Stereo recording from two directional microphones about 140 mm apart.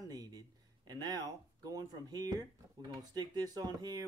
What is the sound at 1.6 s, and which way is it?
Speech, 25° right (ahead or behind).